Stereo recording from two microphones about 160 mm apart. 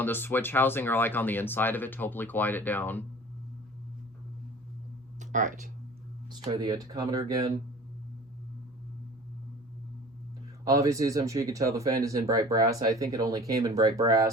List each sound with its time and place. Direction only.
0.0 s speech: 15° left (ahead or behind)
5.2 s speech: 50° right (ahead or behind)
6.4 s speech: 30° right (ahead or behind)
10.7 s speech: 20° right (ahead or behind)